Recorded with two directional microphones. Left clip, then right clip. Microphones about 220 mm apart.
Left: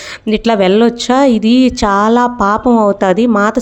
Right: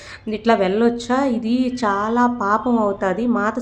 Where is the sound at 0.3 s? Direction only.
40° left (ahead or behind).